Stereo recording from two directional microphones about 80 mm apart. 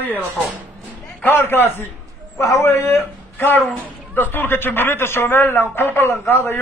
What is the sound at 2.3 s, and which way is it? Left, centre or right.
A man's voice, left.